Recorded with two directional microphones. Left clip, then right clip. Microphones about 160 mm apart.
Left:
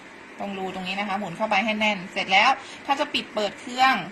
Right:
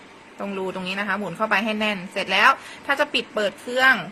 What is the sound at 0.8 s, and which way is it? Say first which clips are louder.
A woman's voice: right 1 dB; 65° right (ahead or behind).